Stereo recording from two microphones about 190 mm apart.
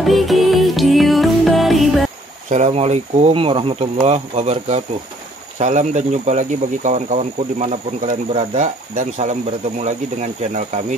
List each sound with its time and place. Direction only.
0.0 s music: centre (ahead or behind)
2.5 s speech: 35° right (ahead or behind)